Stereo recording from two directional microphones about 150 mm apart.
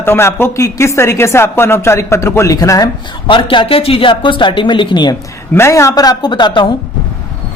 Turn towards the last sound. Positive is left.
turn(degrees=30)  # may be behind; listen again after turning